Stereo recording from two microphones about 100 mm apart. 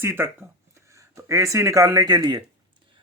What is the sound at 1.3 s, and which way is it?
Speech, 30° right (ahead or behind).